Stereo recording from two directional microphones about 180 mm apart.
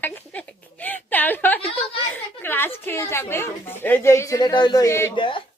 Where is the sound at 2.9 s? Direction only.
15° left (ahead or behind).